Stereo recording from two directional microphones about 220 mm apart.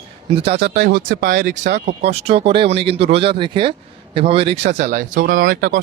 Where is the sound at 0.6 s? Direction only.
45° right (ahead or behind).